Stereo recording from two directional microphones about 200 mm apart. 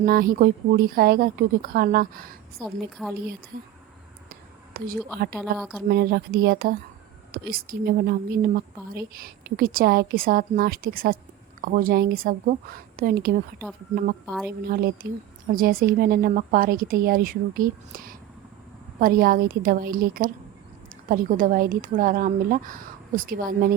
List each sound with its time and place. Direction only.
0.0 s speech: 45° right (ahead or behind)
2.6 s a woman's voice: centre (ahead or behind)
4.3 s whispering: 45° right (ahead or behind)
5.4 s a woman's voice: centre (ahead or behind)
5.9 s speech: 50° right (ahead or behind)
14.6 s speech: 50° right (ahead or behind)